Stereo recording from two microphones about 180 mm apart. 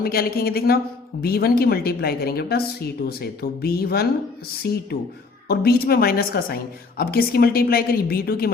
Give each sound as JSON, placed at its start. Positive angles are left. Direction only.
{"t": 0.0, "sound": "a woman's voice", "side_deg": 55}